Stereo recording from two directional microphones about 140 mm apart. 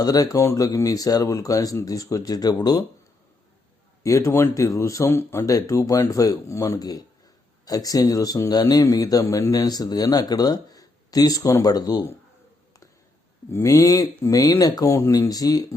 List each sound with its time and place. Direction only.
0.0 s speech: 25° left (ahead or behind)
4.0 s speech: 20° left (ahead or behind)
13.5 s speech: 20° left (ahead or behind)